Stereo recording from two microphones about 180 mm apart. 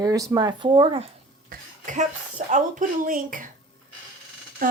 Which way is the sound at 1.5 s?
45° right (ahead or behind).